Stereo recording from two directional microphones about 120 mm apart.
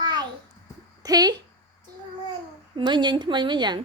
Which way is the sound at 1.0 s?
35° right (ahead or behind).